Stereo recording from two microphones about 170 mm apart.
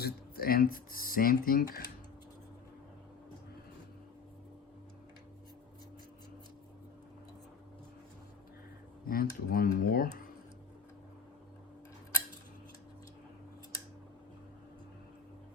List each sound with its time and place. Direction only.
0.0 s speech: 60° left (ahead or behind)
9.0 s speech: 60° left (ahead or behind)